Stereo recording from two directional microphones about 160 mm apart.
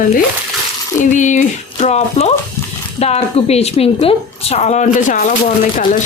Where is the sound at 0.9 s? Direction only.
50° left (ahead or behind).